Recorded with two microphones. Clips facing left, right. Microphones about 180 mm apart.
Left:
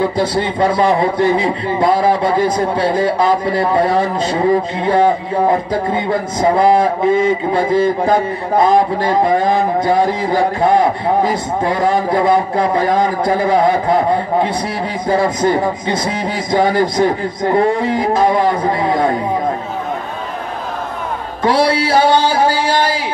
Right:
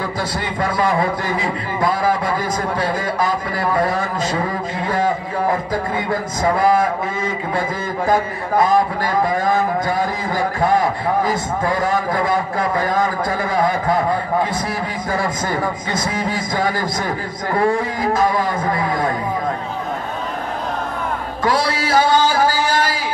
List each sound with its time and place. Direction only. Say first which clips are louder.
0.0 s a man's voice: left 8 dB; 25° left (ahead or behind)
21.4 s a man's voice: left 6 dB; 25° left (ahead or behind)